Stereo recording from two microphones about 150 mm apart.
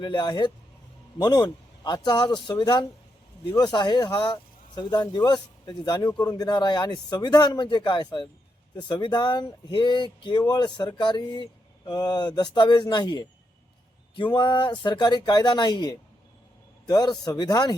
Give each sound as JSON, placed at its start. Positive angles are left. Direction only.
{"t": 0.0, "sound": "speech", "side_deg": 30}